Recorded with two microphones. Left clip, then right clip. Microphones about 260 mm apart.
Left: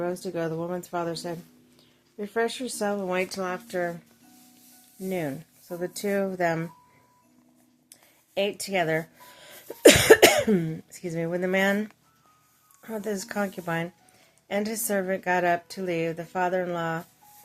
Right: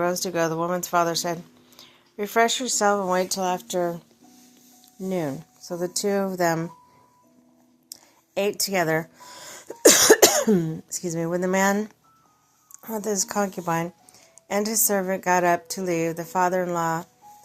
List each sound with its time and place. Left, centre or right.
0.0 s speech: centre
5.0 s speech: centre
7.9 s a sound: centre
8.6 s sneeze: centre
10.4 s speech: centre